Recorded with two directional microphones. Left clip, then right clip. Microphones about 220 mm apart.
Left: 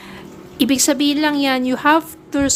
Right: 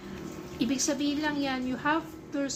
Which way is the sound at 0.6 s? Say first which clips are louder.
Left 13 dB; 50° left (ahead or behind).